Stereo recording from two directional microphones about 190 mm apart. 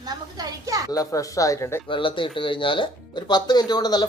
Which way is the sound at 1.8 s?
25° left (ahead or behind).